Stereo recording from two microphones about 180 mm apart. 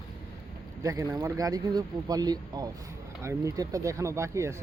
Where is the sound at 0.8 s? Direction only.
20° right (ahead or behind).